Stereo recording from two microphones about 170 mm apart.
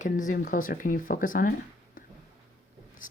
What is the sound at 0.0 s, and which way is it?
A woman's voice, 50° left (ahead or behind).